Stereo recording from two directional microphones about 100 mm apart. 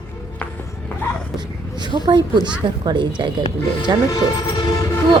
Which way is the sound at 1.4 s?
45° right (ahead or behind).